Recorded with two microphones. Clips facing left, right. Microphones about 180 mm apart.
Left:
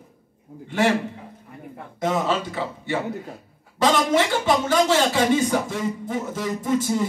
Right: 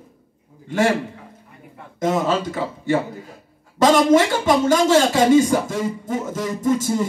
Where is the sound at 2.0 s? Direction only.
40° right (ahead or behind).